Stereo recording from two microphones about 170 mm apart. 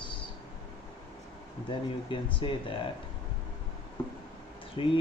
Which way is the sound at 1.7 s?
30° left (ahead or behind).